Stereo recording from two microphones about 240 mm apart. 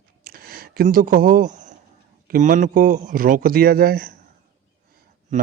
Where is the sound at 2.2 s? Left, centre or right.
Right.